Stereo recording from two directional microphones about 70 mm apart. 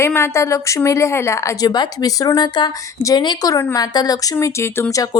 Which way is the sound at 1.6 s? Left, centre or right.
Left.